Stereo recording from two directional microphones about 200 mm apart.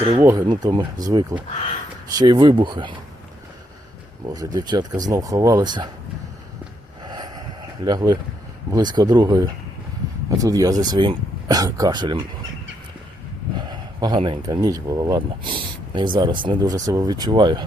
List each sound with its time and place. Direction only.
0.2 s speech: 10° right (ahead or behind)
0.4 s speech: 25° right (ahead or behind)
4.4 s speech: 20° right (ahead or behind)
7.0 s vehicle: 20° right (ahead or behind)
7.9 s speech: 20° right (ahead or behind)
13.6 s speech: 20° right (ahead or behind)